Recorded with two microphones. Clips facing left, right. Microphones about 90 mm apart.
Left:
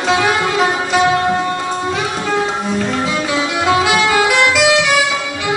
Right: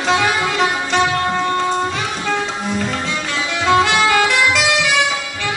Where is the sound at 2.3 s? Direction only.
5° left (ahead or behind).